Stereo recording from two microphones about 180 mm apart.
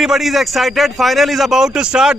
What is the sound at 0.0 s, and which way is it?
A man's voice, centre (ahead or behind).